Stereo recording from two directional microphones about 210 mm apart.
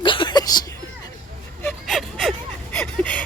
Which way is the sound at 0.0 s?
25° left (ahead or behind).